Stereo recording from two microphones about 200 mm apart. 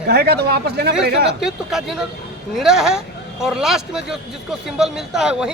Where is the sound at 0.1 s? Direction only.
50° right (ahead or behind).